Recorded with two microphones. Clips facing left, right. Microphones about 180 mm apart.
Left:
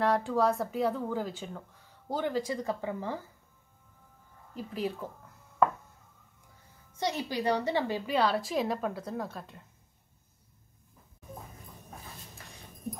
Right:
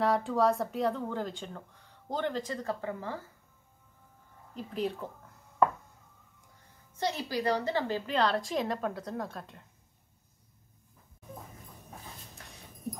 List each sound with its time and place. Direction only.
0.0 s speech: centre (ahead or behind); by 3.2 s 15° left (ahead or behind)
4.6 s speech: 5° left (ahead or behind)
7.1 s speech: 20° left (ahead or behind); by 9.7 s centre (ahead or behind)